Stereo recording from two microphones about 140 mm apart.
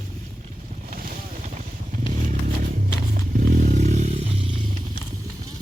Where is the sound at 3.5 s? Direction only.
60° right (ahead or behind); by 4.6 s 40° right (ahead or behind).